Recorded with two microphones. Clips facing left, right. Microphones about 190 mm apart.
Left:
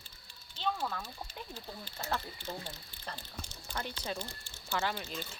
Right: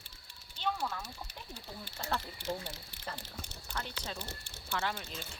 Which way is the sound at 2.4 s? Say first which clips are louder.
Right 4 dB; 80° right.